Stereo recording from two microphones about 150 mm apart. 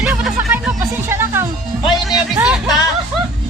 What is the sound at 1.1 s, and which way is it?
Speech, 15° right (ahead or behind).